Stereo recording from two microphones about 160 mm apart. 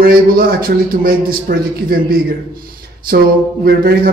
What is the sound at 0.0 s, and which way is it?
A man's voice, 70° right (ahead or behind).